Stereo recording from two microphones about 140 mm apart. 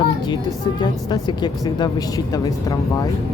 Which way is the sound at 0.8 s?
30° left (ahead or behind).